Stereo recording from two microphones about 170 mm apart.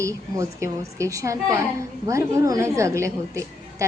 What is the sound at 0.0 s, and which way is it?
A woman's voice, 15° right (ahead or behind).